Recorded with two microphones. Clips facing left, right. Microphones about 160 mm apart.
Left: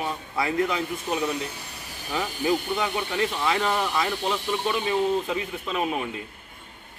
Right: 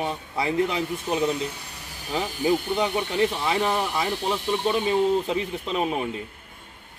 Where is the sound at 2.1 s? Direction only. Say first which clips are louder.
Right 2 dB; 20° right (ahead or behind).